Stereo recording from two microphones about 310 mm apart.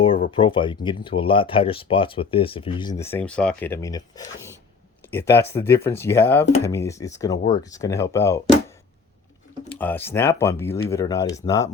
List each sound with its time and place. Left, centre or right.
0.0 s speech: centre
9.7 s speech: centre